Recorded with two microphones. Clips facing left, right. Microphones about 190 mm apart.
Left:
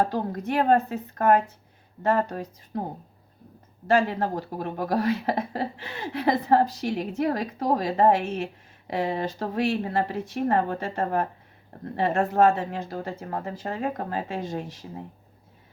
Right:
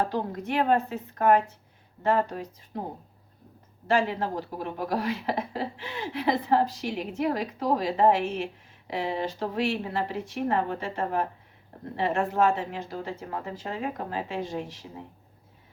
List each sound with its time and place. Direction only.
0.1 s speech: 40° left (ahead or behind)
3.8 s speech: 45° left (ahead or behind)